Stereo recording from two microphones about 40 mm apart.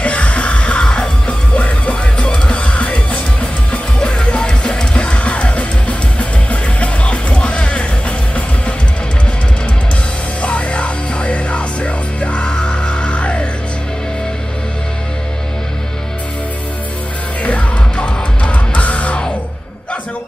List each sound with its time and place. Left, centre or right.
0.0 s music: left
10.4 s music: left
17.4 s music: left